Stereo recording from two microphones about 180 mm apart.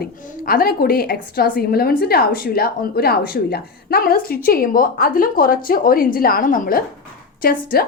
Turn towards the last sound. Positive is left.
turn(degrees=55)  # may be behind; listen again after turning